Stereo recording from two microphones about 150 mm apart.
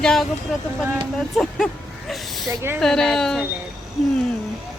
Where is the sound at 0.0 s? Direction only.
5° left (ahead or behind).